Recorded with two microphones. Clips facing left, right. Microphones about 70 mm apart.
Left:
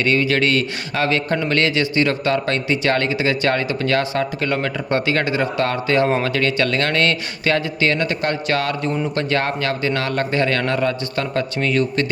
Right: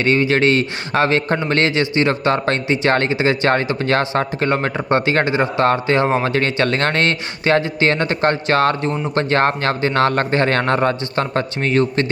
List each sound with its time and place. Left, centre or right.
0.0 s a man's voice: right